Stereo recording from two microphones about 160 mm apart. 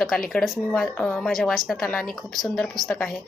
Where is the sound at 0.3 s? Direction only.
Centre (ahead or behind).